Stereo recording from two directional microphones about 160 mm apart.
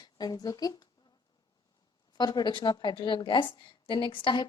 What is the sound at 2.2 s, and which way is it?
A woman's voice, 25° left (ahead or behind).